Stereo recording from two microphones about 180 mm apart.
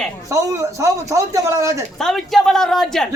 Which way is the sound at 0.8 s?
15° right (ahead or behind).